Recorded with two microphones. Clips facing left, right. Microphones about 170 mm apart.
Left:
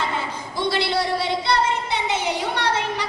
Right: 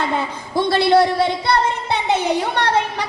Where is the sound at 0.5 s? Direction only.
55° right (ahead or behind).